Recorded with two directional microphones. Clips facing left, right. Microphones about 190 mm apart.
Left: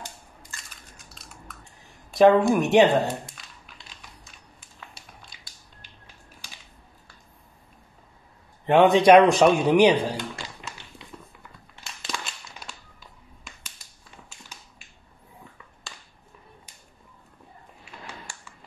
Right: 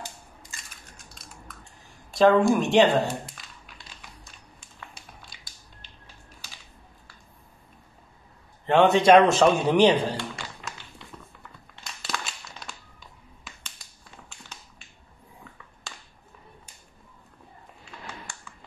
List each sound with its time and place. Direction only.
2.1 s a woman's voice: 20° left (ahead or behind)
8.6 s a man's voice: 15° left (ahead or behind)
11.7 s crumpling: 10° left (ahead or behind)